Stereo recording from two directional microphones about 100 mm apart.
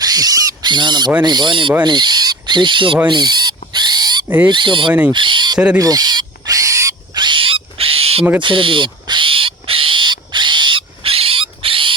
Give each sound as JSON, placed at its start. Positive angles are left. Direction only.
{"t": 0.0, "sound": "owl", "side_deg": -40}
{"t": 0.7, "sound": "speech", "side_deg": -50}
{"t": 1.8, "sound": "owl", "side_deg": -45}
{"t": 3.1, "sound": "owl", "side_deg": -45}
{"t": 4.4, "sound": "speech", "side_deg": -55}
{"t": 5.1, "sound": "owl", "side_deg": -55}
{"t": 5.7, "sound": "owl", "side_deg": -40}
{"t": 7.2, "sound": "owl", "side_deg": -55}
{"t": 8.4, "sound": "owl", "side_deg": -55}